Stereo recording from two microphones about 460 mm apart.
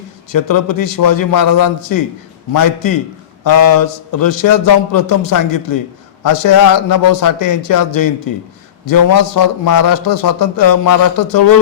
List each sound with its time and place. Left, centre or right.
0.3 s a man's voice: left